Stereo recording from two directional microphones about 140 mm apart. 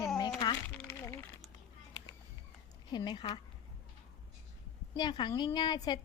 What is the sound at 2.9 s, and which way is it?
Speech, 35° left (ahead or behind).